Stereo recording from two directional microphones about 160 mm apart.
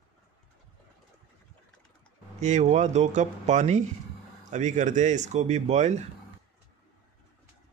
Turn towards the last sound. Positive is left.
turn(degrees=-45)  # may be behind; listen again after turning